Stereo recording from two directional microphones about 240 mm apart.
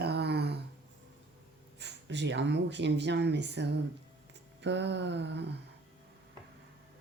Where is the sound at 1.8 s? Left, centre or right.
Right.